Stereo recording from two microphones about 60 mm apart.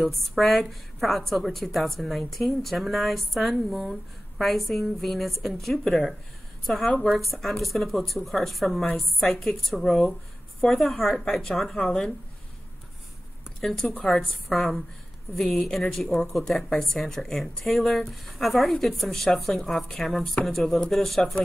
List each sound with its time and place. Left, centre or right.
0.0 s a woman's voice: centre
6.9 s a woman's voice: centre
7.2 s a woman's voice: centre
13.6 s a woman's voice: centre